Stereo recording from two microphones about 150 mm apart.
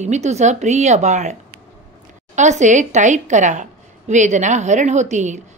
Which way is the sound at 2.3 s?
55° right (ahead or behind).